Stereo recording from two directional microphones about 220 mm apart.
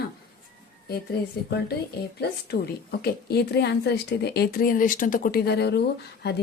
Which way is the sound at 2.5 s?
45° left (ahead or behind).